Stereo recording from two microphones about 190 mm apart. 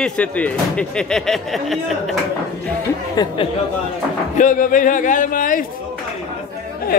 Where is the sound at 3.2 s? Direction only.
20° left (ahead or behind).